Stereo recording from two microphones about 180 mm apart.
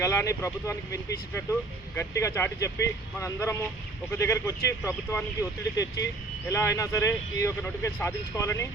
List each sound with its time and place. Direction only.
0.0 s speech: 15° left (ahead or behind)
2.0 s speech: 15° left (ahead or behind)